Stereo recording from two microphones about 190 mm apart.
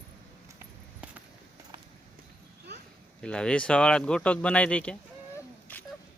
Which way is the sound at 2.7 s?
60° right (ahead or behind).